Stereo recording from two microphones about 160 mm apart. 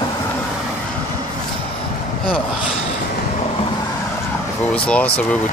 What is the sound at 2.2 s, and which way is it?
Speech, 5° left (ahead or behind).